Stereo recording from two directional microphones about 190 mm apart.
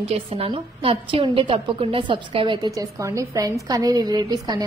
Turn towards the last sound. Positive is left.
turn(degrees=-20)  # may be behind; listen again after turning